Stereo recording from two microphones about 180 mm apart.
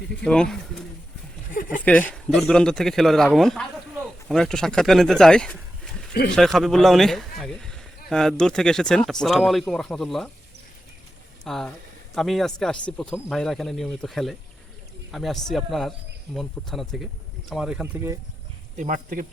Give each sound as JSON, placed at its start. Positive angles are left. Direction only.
{"t": 0.3, "sound": "speech", "side_deg": 5}
{"t": 11.4, "sound": "speech", "side_deg": 0}
{"t": 18.8, "sound": "speech", "side_deg": -45}